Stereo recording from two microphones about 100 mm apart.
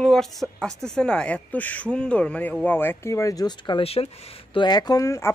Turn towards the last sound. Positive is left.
turn(degrees=35)  # may be behind; listen again after turning